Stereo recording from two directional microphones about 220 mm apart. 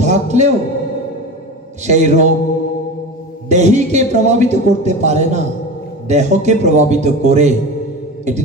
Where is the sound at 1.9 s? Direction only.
30° right (ahead or behind).